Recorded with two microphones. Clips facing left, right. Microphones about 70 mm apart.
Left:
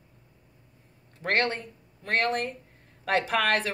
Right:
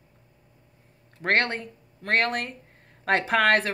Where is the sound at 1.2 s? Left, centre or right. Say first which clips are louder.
Right 2 dB; right.